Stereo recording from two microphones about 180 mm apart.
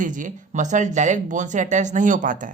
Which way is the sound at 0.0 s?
45° right (ahead or behind).